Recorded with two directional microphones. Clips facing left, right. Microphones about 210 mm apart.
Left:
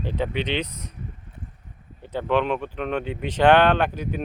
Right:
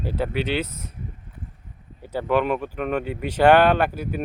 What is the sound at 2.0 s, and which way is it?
Speech, 10° right (ahead or behind).